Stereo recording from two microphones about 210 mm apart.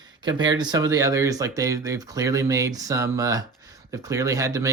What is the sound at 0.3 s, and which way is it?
Speech, 20° right (ahead or behind).